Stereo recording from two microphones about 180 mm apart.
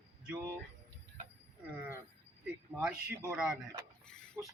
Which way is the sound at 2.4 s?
5° right (ahead or behind).